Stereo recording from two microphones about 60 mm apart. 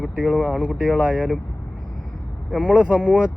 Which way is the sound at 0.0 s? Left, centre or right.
Centre.